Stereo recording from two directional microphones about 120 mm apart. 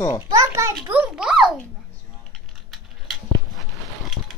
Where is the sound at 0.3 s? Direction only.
30° right (ahead or behind).